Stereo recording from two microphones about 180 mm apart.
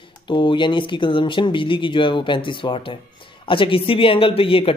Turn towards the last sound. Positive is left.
turn(degrees=30)  # may be behind; listen again after turning